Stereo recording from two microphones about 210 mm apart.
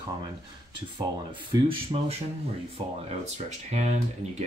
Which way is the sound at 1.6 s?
30° right (ahead or behind).